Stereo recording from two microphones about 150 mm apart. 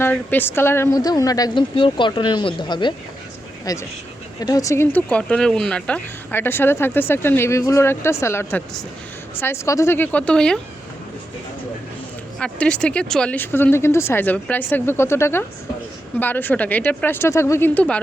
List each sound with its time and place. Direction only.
0.0 s speech: 10° left (ahead or behind)
12.4 s speech: 5° left (ahead or behind)